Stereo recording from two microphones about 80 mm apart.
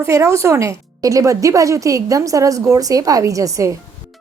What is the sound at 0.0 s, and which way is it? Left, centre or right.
A woman's voice, right.